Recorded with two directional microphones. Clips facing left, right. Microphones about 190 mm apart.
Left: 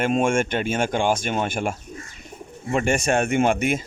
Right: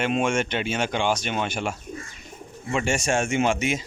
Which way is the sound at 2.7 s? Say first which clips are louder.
Left 3 dB; 55° left (ahead or behind).